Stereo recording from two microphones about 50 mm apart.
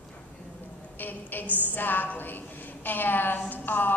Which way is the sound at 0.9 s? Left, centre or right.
Left.